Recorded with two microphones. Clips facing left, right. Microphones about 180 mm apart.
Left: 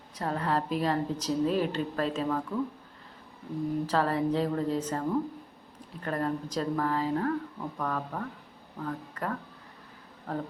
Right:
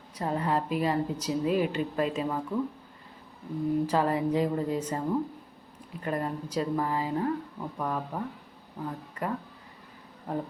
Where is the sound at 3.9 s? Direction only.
10° right (ahead or behind).